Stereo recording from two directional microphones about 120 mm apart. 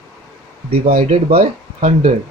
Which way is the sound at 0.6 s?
55° right (ahead or behind).